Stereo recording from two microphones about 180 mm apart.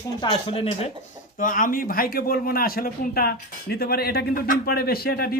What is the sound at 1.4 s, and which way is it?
A man's voice, 50° left (ahead or behind).